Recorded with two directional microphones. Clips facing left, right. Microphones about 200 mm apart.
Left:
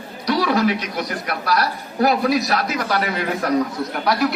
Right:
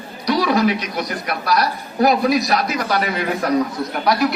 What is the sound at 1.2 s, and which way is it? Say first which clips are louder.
A man's voice: right 2 dB; 15° right (ahead or behind).